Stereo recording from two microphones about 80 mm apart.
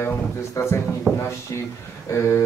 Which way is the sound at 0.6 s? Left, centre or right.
Left.